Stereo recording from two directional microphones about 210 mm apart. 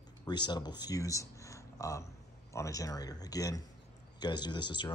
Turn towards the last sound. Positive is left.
turn(degrees=20)  # may be behind; listen again after turning